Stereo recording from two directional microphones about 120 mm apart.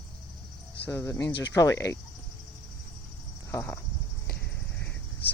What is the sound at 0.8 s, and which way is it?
Speech, 20° left (ahead or behind).